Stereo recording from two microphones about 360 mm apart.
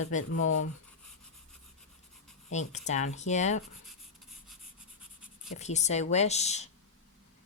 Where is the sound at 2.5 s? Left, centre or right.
Centre.